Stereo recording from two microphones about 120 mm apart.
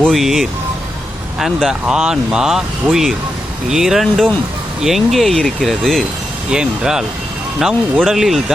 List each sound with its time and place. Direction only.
0.0 s speech: centre (ahead or behind)